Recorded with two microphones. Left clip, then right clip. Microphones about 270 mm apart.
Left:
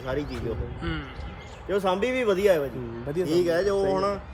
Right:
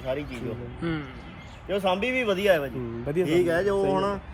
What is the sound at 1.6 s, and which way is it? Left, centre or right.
Speech, centre.